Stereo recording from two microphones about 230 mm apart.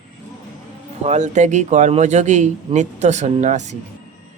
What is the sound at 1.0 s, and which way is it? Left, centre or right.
Speech, right.